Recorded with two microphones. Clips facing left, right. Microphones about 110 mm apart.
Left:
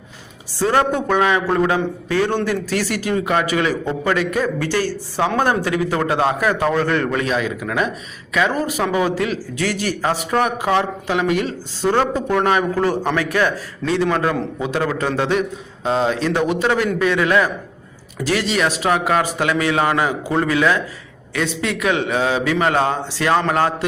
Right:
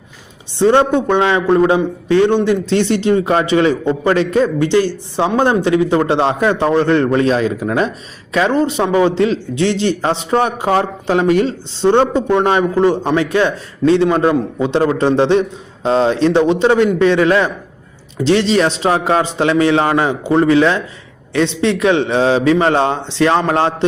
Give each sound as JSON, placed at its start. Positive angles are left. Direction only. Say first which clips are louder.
{"t": 0.6, "sound": "a man's voice", "louder": "right 6 dB", "side_deg": -25}